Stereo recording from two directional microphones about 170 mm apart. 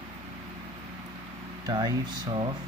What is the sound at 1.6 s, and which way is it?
Speech, 25° right (ahead or behind).